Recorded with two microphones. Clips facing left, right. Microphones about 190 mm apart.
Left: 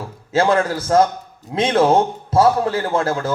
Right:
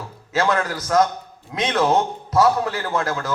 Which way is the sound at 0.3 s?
30° left (ahead or behind).